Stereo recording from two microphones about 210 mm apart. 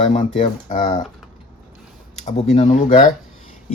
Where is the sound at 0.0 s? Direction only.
35° left (ahead or behind).